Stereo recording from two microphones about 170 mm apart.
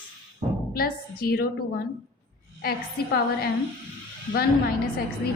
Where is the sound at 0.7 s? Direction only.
60° left (ahead or behind).